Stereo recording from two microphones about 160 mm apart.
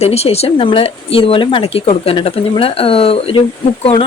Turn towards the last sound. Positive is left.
turn(degrees=35)  # may be behind; listen again after turning